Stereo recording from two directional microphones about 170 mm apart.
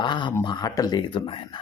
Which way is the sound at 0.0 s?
25° left (ahead or behind).